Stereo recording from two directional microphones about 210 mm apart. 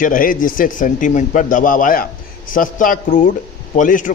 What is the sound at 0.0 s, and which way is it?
A man's voice, 40° left (ahead or behind).